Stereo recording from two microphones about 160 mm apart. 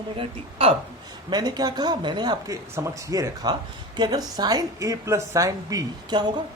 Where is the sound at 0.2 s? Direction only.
35° right (ahead or behind).